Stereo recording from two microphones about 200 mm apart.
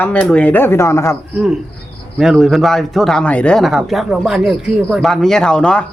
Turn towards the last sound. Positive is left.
turn(degrees=5)  # may be behind; listen again after turning